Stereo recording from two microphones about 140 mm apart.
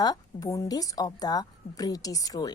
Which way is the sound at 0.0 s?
25° left (ahead or behind).